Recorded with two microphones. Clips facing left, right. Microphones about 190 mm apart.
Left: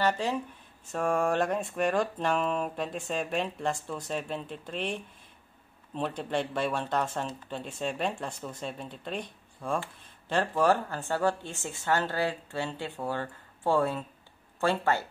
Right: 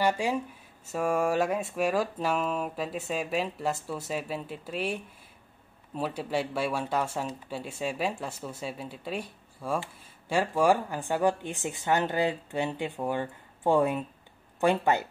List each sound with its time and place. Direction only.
0.0 s speech: 10° right (ahead or behind)